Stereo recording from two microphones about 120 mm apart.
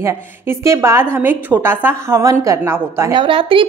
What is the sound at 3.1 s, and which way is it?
Speech, 45° right (ahead or behind).